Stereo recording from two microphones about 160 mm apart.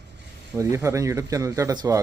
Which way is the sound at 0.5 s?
20° right (ahead or behind).